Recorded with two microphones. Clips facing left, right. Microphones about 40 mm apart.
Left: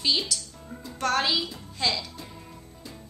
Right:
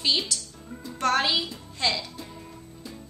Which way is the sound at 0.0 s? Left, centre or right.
Centre.